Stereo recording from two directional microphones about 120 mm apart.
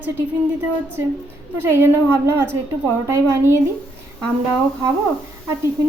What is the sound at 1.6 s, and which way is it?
A woman's voice, 20° right (ahead or behind).